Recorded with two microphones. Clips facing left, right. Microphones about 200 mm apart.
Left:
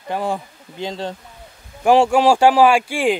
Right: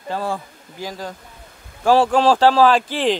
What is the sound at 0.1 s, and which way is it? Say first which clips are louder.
Speech: left 2 dB; 15° left (ahead or behind).